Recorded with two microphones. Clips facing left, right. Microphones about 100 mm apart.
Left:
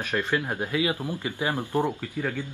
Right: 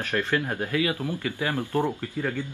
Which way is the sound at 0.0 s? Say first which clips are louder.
Right 1 dB; 20° left (ahead or behind).